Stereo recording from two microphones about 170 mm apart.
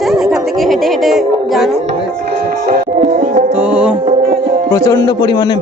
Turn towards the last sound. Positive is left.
turn(degrees=25)  # may be behind; listen again after turning